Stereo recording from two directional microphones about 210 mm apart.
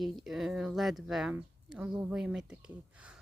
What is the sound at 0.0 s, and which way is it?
A woman's voice, centre (ahead or behind).